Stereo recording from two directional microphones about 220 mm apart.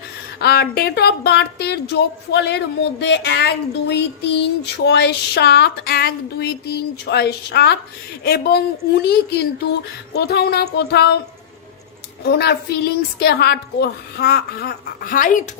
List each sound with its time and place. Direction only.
0.3 s speech: 45° left (ahead or behind)
12.2 s speech: 50° left (ahead or behind)